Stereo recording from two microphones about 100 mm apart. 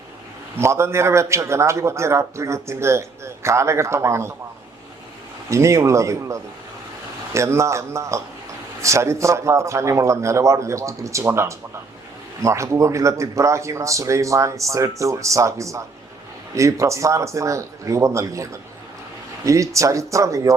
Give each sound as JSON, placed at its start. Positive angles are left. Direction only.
{"t": 0.6, "sound": "a man's voice", "side_deg": -25}
{"t": 5.5, "sound": "a man's voice", "side_deg": -30}